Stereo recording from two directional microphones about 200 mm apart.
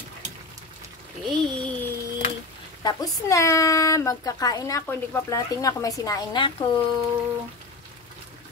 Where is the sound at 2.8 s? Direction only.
15° left (ahead or behind).